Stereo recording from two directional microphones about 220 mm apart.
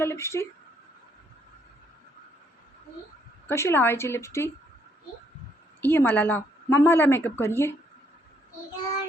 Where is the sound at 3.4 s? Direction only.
10° left (ahead or behind).